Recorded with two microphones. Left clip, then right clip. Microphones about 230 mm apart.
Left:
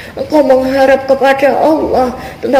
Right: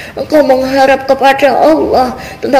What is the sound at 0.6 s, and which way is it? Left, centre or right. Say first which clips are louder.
A woman's voice: right 1 dB; right.